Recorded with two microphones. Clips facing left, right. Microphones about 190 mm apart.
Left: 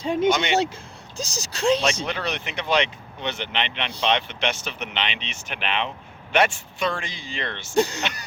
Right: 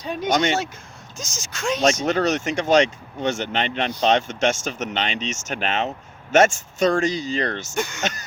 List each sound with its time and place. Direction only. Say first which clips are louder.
0.0 s speech: left 5 dB; 25° left (ahead or behind)
0.3 s speech: right 3 dB; 45° right (ahead or behind)
1.1 s speech: left 4 dB; 35° left (ahead or behind)
2.0 s speech: right 8 dB; 45° right (ahead or behind)
7.8 s speech: left 8 dB; 35° left (ahead or behind)